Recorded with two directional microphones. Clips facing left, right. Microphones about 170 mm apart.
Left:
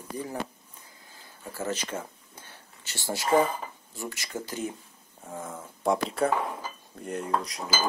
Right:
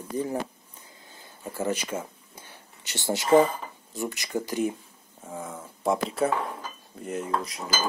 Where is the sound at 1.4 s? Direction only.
15° right (ahead or behind).